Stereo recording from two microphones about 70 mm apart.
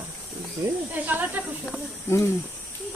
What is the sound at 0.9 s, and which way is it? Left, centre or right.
Speech, right.